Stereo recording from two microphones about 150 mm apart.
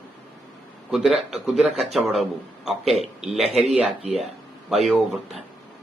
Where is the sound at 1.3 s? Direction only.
Centre (ahead or behind).